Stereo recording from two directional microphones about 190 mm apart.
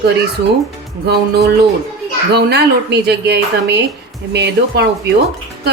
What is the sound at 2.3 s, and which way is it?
Speech, 60° right (ahead or behind).